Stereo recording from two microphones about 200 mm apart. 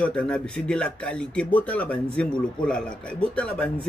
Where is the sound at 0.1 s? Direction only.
5° left (ahead or behind).